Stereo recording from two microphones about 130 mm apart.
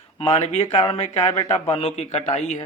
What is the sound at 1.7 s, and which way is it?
Speech, 50° left (ahead or behind).